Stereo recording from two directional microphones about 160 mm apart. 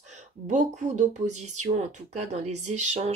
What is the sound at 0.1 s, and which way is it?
Speech, 50° right (ahead or behind).